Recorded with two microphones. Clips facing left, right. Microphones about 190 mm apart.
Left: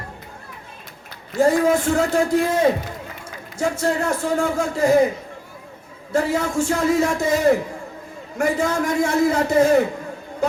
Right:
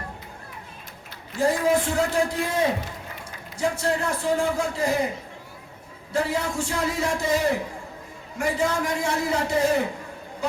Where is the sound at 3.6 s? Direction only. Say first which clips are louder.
Left 3 dB; 45° left (ahead or behind).